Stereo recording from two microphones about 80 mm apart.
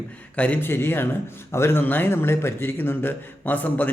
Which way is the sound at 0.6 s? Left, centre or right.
Left.